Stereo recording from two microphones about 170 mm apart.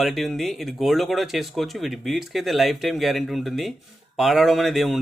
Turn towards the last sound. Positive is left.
turn(degrees=0)  # may be behind; listen again after turning